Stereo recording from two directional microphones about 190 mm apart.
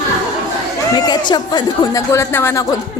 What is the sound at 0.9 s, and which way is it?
Speech, 20° left (ahead or behind).